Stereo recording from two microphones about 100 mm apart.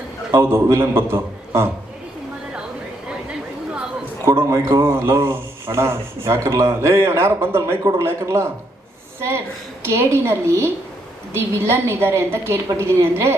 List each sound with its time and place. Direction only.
0.3 s speech: 25° right (ahead or behind)
4.3 s speech: 30° right (ahead or behind)
9.8 s speech: 25° right (ahead or behind)